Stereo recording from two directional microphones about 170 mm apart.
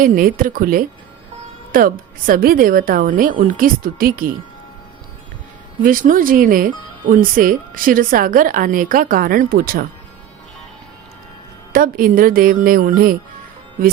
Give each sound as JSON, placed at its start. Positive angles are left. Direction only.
{"t": 0.0, "sound": "speech", "side_deg": -55}
{"t": 5.8, "sound": "speech", "side_deg": -55}
{"t": 11.7, "sound": "speech", "side_deg": -55}